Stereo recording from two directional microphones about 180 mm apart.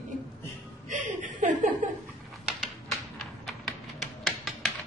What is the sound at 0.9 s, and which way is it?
Chuckle, 45° right (ahead or behind).